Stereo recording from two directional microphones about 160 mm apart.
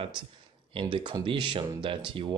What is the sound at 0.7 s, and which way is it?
Speech, 30° right (ahead or behind).